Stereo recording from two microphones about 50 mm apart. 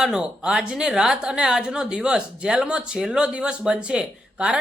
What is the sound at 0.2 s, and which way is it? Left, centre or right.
A woman's voice, centre.